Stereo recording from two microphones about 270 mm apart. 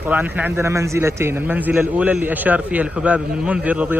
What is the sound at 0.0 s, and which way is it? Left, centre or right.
A man's voice, centre.